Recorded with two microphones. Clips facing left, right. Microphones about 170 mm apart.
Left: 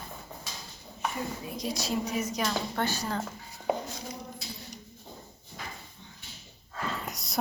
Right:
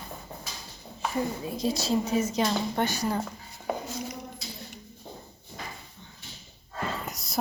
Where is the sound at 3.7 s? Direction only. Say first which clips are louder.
Left 2 dB; 15° left (ahead or behind).